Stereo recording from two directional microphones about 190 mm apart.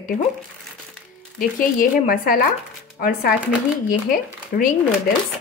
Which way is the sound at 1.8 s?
50° left (ahead or behind).